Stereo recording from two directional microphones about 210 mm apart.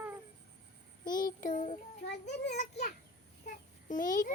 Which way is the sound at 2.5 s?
35° left (ahead or behind).